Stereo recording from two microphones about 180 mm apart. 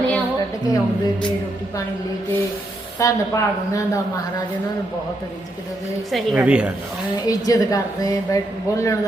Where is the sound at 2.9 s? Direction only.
15° left (ahead or behind).